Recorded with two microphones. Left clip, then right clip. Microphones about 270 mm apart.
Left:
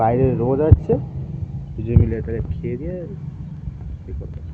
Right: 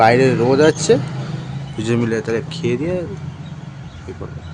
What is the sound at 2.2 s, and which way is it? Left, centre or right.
Speech, centre.